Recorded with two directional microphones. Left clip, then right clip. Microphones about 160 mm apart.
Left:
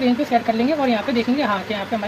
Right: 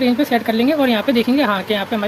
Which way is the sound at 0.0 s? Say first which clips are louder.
Right 2 dB; 55° right (ahead or behind).